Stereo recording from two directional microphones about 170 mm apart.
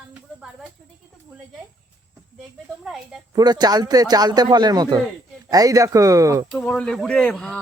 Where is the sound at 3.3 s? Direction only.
25° right (ahead or behind).